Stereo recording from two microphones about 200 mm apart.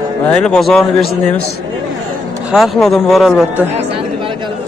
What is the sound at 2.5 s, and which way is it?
Speech, centre (ahead or behind).